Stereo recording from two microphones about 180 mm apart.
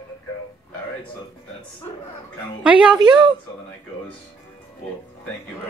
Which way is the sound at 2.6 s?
5° right (ahead or behind).